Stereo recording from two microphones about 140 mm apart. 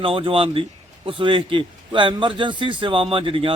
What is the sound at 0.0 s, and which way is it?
A man's voice, 40° right (ahead or behind).